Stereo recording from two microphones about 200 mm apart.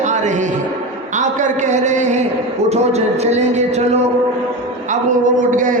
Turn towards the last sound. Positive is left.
turn(degrees=-40)  # may be behind; listen again after turning